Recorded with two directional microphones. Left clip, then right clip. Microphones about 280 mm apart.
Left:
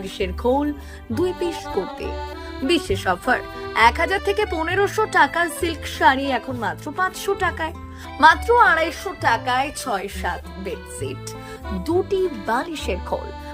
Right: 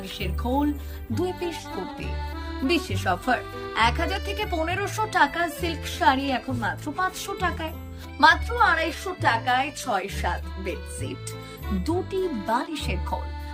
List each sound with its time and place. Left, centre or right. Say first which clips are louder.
0.0 s speech: left 9 dB; centre
12.2 s speech: left 5 dB; centre
12.5 s speech: left 3 dB; centre